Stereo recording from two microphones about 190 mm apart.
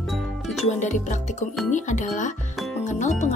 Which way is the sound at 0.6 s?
40° left (ahead or behind).